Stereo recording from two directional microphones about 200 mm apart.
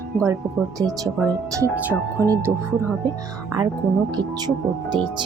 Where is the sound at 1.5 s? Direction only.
15° right (ahead or behind).